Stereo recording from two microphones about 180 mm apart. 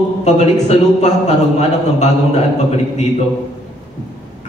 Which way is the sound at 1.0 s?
40° left (ahead or behind).